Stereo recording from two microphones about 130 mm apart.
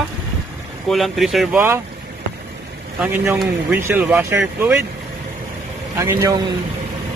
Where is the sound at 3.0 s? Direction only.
15° right (ahead or behind).